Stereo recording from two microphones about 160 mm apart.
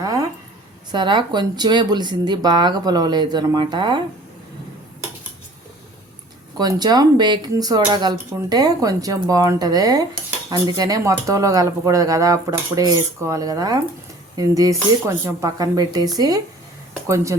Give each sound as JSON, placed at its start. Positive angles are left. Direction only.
{"t": 0.9, "sound": "speech", "side_deg": -30}
{"t": 6.6, "sound": "speech", "side_deg": -25}